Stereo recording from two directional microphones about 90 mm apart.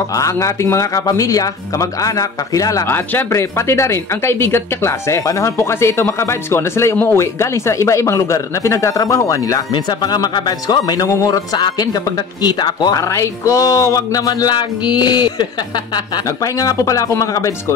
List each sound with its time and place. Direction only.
0.2 s speech: 35° left (ahead or behind)
2.9 s speech: 30° left (ahead or behind)
10.0 s speech: 50° left (ahead or behind)
13.1 s speech: 35° left (ahead or behind); by 15.4 s 55° left (ahead or behind)
16.5 s speech: 40° left (ahead or behind)